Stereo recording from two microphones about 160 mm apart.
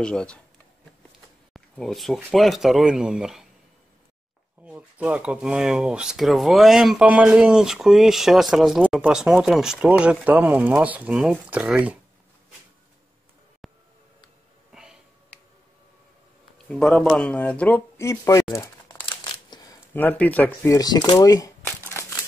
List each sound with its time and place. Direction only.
0.0 s speech: 5° left (ahead or behind)
1.5 s speech: centre (ahead or behind)
4.6 s speech: 10° right (ahead or behind)
13.6 s a sound: centre (ahead or behind)
16.6 s speech: 5° left (ahead or behind); by 18.7 s 20° left (ahead or behind)
18.9 s a sound: 30° left (ahead or behind)
19.9 s speech: 10° left (ahead or behind)
21.6 s crumpling: 10° left (ahead or behind)